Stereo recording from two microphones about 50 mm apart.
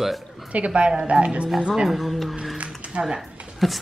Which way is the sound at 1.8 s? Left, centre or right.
Centre.